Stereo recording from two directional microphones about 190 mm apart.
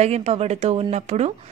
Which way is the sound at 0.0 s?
35° right (ahead or behind).